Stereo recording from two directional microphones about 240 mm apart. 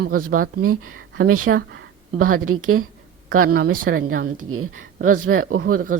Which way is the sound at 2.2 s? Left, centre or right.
Right.